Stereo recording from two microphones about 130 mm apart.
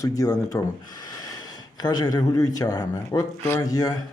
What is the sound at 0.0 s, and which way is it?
Speech, 25° left (ahead or behind).